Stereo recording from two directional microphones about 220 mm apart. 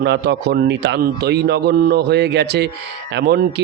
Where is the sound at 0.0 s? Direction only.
50° right (ahead or behind).